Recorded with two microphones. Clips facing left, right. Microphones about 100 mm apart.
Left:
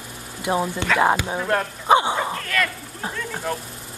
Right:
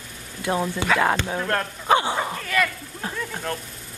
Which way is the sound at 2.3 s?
10° right (ahead or behind).